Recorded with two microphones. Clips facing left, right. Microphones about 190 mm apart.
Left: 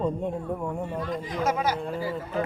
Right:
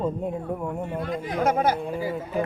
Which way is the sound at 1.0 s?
60° right (ahead or behind).